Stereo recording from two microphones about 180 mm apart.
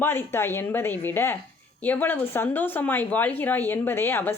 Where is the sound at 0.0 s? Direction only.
10° left (ahead or behind).